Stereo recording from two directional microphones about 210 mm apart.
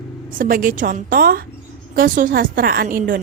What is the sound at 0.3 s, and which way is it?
A woman's voice, 40° right (ahead or behind).